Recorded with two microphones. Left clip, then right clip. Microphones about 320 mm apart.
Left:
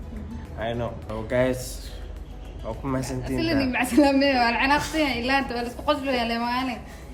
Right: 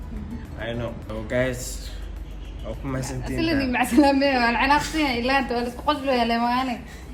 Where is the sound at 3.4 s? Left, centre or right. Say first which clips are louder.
Right 2 dB; centre.